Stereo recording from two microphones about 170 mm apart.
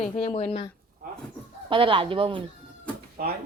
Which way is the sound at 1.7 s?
30° right (ahead or behind).